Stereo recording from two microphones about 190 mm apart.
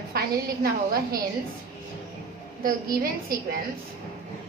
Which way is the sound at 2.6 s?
50° right (ahead or behind).